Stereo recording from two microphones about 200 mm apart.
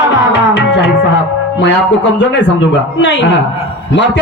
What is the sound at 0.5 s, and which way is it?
Music, 55° left (ahead or behind).